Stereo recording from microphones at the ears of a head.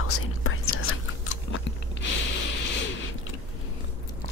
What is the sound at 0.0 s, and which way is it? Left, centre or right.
Chewing, left.